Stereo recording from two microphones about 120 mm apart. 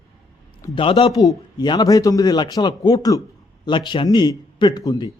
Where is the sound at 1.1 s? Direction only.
35° left (ahead or behind).